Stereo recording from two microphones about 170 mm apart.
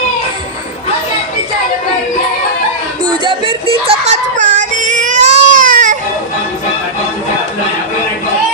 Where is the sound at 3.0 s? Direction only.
30° right (ahead or behind).